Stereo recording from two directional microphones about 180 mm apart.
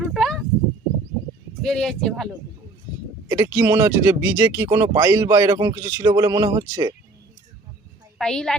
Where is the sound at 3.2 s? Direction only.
15° right (ahead or behind).